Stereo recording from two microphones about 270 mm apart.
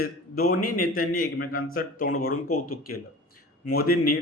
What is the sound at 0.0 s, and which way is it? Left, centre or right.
Speech, left.